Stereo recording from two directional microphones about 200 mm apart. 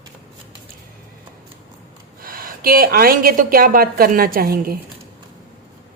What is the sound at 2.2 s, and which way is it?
A woman's voice, 45° right (ahead or behind).